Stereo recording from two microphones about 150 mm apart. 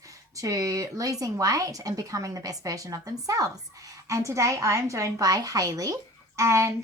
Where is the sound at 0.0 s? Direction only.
20° right (ahead or behind).